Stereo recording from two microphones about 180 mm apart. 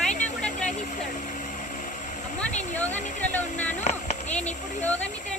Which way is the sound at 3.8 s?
40° left (ahead or behind).